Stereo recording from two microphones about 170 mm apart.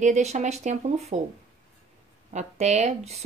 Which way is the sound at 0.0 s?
45° right (ahead or behind).